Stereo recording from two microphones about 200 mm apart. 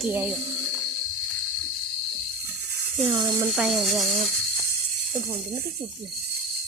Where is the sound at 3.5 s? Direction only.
Centre (ahead or behind).